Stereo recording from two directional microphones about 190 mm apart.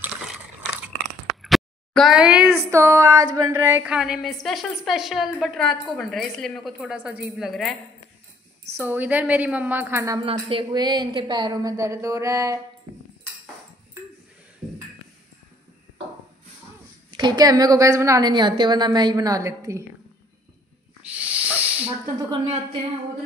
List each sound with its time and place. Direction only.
1.2 s speech: centre (ahead or behind)
8.7 s a woman's voice: 10° right (ahead or behind)
10.2 s a woman's voice: 30° right (ahead or behind)
17.1 s a woman's voice: 20° right (ahead or behind)
21.1 s snake: 10° right (ahead or behind)